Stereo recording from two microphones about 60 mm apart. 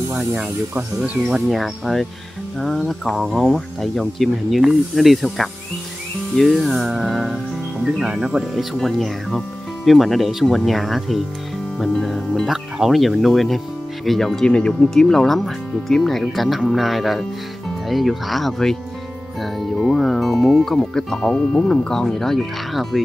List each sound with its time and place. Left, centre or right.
0.7 s speech: right
1.3 s speech: centre
8.7 s speech: centre
11.8 s music: centre
12.9 s speech: centre